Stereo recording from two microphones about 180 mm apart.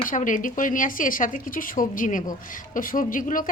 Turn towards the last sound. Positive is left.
turn(degrees=50)  # may be behind; listen again after turning